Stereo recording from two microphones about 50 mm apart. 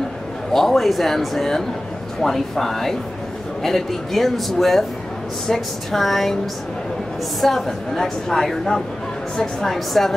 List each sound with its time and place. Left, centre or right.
0.5 s a man's voice: centre
7.3 s a woman's voice: centre